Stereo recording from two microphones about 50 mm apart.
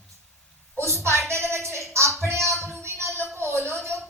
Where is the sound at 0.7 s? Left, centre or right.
Right.